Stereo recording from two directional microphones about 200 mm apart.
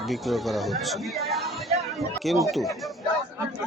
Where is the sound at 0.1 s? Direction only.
Centre (ahead or behind).